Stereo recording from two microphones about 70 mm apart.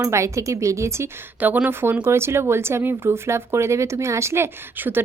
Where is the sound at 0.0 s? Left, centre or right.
Right.